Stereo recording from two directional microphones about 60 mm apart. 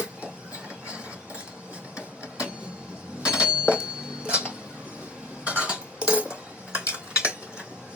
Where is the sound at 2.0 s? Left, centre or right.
Centre.